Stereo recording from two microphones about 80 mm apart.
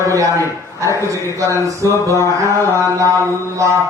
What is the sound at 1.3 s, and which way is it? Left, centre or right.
Mantra, right.